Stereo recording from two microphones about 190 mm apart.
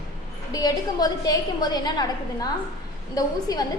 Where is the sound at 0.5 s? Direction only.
20° left (ahead or behind).